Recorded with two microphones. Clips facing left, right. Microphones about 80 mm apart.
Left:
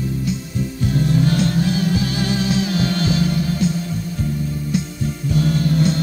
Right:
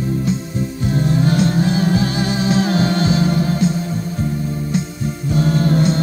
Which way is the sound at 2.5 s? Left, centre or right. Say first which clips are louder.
Right 3 dB; right.